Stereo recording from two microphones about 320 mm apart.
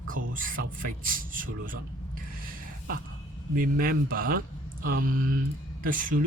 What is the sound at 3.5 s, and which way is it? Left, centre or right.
Speech, right.